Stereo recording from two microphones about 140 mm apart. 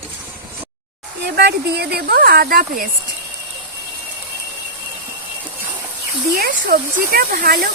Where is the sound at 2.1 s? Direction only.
90° right.